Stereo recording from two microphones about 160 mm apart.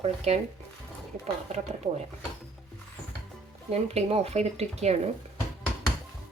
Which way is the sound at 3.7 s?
40° right (ahead or behind).